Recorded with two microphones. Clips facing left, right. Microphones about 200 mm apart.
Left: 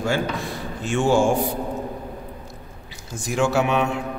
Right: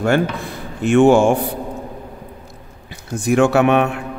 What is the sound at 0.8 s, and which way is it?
Speech, 60° right (ahead or behind).